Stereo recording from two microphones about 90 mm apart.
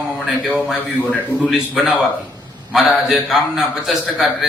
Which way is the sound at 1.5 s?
5° right (ahead or behind).